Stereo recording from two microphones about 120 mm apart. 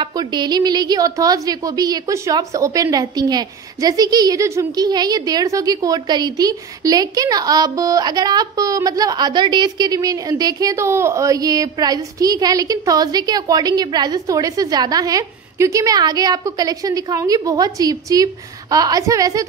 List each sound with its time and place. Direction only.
0.0 s a woman's voice: 35° right (ahead or behind)